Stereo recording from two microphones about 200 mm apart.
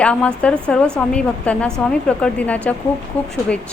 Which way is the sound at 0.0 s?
5° left (ahead or behind).